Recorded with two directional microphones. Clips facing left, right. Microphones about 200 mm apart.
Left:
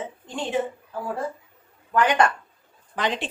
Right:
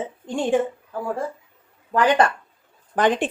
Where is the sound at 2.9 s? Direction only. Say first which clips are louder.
Right 7 dB; 50° right (ahead or behind).